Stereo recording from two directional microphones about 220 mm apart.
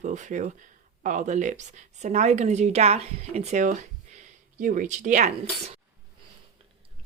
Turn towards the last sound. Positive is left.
turn(degrees=-30)  # may be behind; listen again after turning